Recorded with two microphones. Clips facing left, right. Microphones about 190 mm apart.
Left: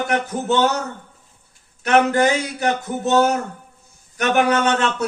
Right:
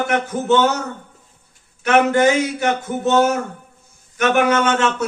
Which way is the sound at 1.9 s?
35° left (ahead or behind).